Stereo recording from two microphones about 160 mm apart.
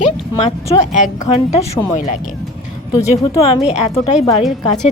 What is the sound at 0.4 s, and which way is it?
Speech, 45° left (ahead or behind).